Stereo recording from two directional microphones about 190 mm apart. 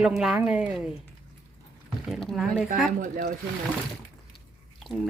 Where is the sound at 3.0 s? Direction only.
45° right (ahead or behind).